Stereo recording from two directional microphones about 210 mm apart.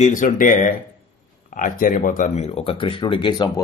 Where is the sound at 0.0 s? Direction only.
35° left (ahead or behind).